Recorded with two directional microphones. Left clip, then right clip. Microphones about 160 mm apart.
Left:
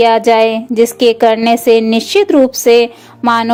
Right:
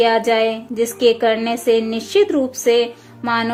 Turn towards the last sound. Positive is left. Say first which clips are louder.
# left 8 dB
turn(degrees=50)  # may be behind; listen again after turning